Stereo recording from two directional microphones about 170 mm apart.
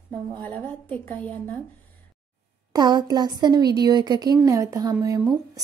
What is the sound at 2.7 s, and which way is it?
Speech, 25° right (ahead or behind).